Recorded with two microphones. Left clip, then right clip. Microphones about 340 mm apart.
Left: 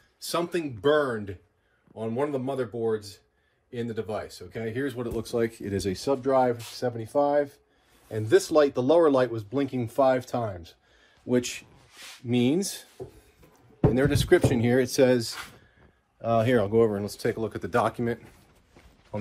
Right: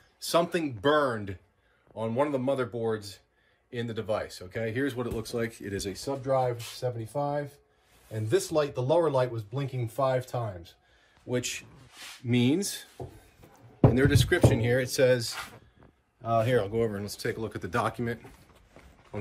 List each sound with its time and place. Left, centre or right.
0.3 s speech: centre; by 10.5 s left
11.2 s speech: centre
12.3 s speech: centre
13.9 s speech: centre
16.3 s speech: left; by 18.2 s centre